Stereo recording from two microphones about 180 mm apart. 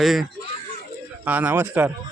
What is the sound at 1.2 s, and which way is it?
Speech, 10° right (ahead or behind).